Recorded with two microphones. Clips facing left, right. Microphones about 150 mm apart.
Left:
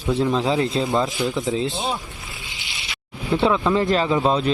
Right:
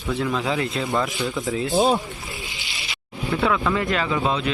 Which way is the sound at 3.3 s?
25° left (ahead or behind).